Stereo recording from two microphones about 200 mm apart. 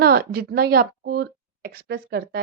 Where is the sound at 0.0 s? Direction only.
50° right (ahead or behind).